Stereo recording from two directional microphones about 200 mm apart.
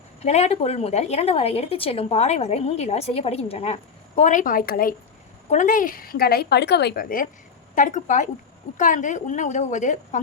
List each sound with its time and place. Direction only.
0.2 s a woman's voice: 35° left (ahead or behind)